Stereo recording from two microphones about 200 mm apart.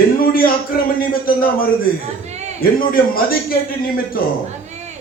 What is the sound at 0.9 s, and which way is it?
A man's voice, 45° left (ahead or behind).